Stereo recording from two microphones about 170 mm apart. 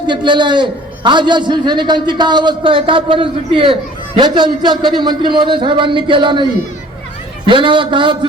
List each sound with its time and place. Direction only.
0.1 s a man's voice: 25° right (ahead or behind)